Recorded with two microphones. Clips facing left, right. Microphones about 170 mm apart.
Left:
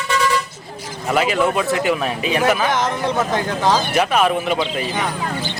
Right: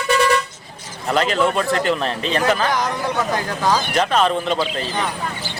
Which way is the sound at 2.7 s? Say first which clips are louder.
Left 2 dB; 25° left (ahead or behind).